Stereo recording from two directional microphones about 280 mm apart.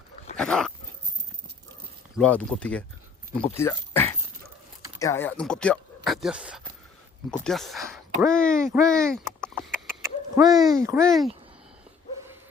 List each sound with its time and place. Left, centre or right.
0.3 s speech: centre
2.1 s speech: centre
10.0 s a sound: centre
10.5 s speech: centre
10.8 s speech: centre
11.1 s speech: centre